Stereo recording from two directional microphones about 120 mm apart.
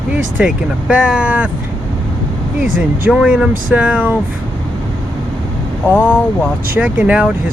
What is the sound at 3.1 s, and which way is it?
Speech, 5° right (ahead or behind).